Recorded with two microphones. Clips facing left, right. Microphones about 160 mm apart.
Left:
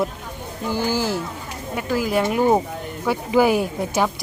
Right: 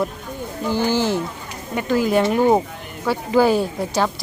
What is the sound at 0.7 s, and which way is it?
Speech, 10° left (ahead or behind).